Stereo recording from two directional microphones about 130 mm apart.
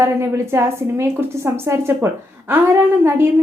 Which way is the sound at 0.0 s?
20° right (ahead or behind).